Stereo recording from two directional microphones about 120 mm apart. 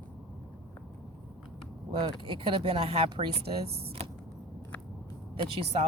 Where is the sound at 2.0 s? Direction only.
45° right (ahead or behind).